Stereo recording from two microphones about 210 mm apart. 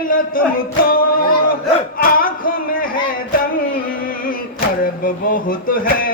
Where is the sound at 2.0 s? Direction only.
40° left (ahead or behind).